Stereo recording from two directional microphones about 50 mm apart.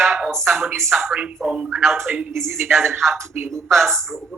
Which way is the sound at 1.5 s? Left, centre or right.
Centre.